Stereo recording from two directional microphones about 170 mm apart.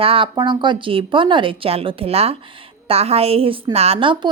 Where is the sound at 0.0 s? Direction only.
30° right (ahead or behind).